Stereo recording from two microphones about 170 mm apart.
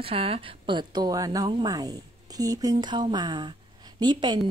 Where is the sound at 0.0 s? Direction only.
35° right (ahead or behind).